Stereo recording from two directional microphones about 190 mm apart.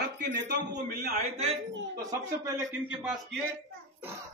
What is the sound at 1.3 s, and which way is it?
Speech, 35° right (ahead or behind).